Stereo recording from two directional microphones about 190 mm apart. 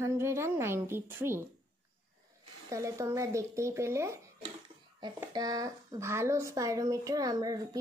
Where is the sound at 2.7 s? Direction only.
15° right (ahead or behind).